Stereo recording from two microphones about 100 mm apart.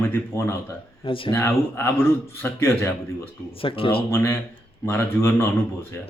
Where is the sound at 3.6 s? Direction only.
65° left (ahead or behind).